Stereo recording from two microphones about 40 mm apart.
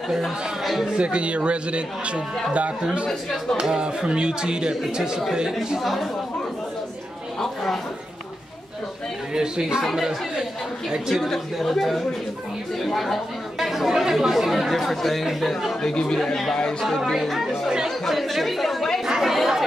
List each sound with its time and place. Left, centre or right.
0.9 s speech: right
3.1 s speech: centre
3.6 s speech: centre
5.8 s speech: centre
7.3 s speech: centre
9.3 s speech: centre
11.2 s speech: centre
15.8 s speech: centre
17.0 s speech: centre
17.5 s speech: centre
17.8 s chatter: centre
19.0 s chatter: centre